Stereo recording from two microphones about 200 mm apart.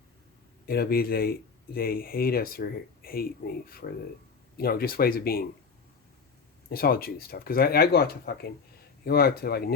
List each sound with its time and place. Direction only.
0.7 s speech: 50° left (ahead or behind)
6.7 s speech: 50° left (ahead or behind)